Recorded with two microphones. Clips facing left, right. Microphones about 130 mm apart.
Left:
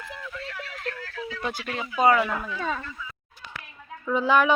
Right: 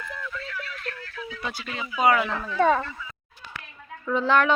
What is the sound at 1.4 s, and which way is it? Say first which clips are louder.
Speech: left 2 dB; 45° left (ahead or behind).